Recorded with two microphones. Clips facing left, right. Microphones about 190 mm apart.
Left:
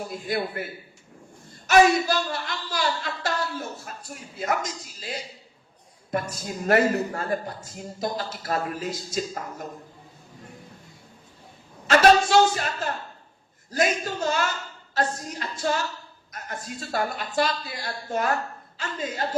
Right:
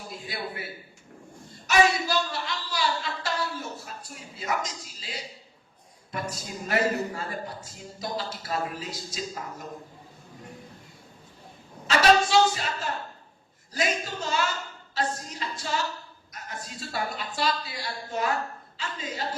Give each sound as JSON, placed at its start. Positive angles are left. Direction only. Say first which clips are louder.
{"t": 0.0, "sound": "speech", "louder": "left 8 dB", "side_deg": 50}
{"t": 6.7, "sound": "speech", "louder": "left 5 dB", "side_deg": 55}
{"t": 11.9, "sound": "a sound", "louder": "left 4 dB", "side_deg": 50}
{"t": 13.7, "sound": "speech", "louder": "left 4 dB", "side_deg": 50}